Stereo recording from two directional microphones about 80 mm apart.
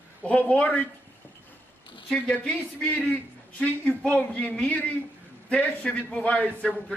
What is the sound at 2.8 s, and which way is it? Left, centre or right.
A man's voice, centre.